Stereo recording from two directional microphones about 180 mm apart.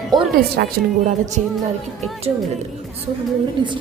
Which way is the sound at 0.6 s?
60° right (ahead or behind).